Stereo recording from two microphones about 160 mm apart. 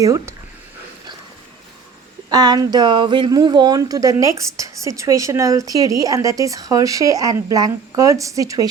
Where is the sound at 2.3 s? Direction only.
25° right (ahead or behind).